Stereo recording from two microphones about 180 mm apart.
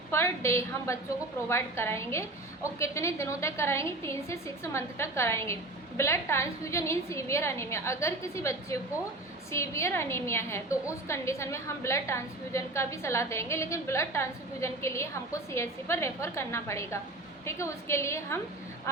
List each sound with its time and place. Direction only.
0.1 s a woman's voice: 15° left (ahead or behind)